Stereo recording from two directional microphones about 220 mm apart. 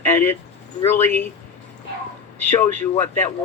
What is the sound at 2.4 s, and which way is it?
Speech, 10° left (ahead or behind).